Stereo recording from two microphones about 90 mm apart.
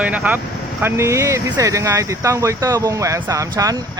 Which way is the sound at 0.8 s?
30° right (ahead or behind).